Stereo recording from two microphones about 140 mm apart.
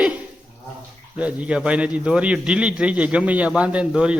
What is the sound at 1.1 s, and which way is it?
A man's voice, 10° right (ahead or behind).